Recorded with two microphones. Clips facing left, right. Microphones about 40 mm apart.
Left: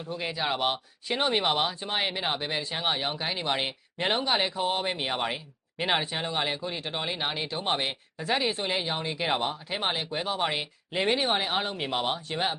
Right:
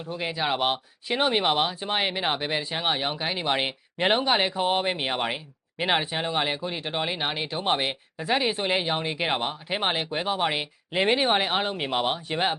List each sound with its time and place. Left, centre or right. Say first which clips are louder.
0.1 s speech: right 3 dB; centre